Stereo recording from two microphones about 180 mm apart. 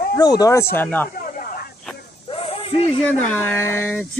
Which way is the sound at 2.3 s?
30° left (ahead or behind).